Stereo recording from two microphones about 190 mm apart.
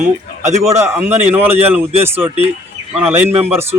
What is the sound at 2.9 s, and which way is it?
Speech, 10° right (ahead or behind).